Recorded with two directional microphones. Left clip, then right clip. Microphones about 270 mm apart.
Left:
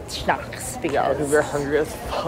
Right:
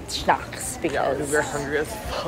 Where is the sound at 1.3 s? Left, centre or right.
Left.